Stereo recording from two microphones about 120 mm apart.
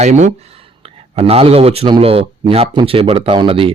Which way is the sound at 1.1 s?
55° right (ahead or behind).